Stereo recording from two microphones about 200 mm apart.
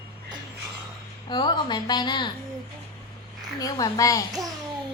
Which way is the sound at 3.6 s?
20° left (ahead or behind).